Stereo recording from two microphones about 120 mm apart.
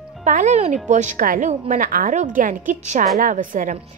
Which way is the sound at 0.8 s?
90° right.